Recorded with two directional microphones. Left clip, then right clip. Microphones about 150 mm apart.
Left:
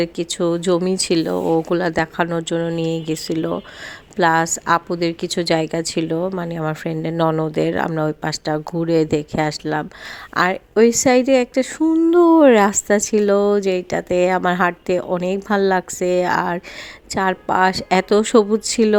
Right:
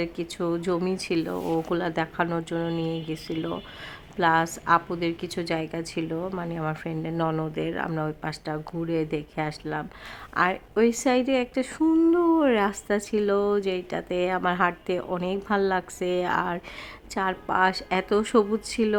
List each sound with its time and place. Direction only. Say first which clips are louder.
0.0 s speech: left 9 dB; 35° left (ahead or behind)
2.8 s speech: left 9 dB; 45° left (ahead or behind)